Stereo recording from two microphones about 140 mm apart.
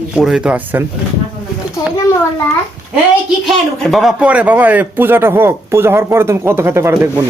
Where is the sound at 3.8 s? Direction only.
Centre (ahead or behind); by 7.2 s 20° right (ahead or behind).